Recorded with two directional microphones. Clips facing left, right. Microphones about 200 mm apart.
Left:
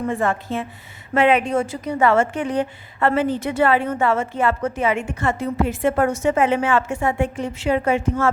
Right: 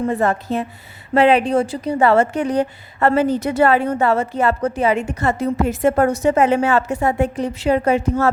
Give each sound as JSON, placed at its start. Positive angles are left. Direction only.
{"t": 0.1, "sound": "a woman's voice", "side_deg": -40}